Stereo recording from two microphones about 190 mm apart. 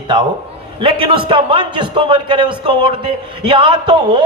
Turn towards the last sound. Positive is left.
turn(degrees=-25)  # may be behind; listen again after turning